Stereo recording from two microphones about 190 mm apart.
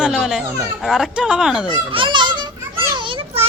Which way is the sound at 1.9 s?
25° right (ahead or behind).